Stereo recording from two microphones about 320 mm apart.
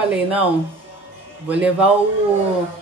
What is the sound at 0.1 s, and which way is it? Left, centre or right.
Speech, centre.